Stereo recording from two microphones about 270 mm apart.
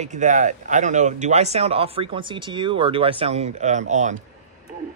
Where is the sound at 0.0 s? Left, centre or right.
Right.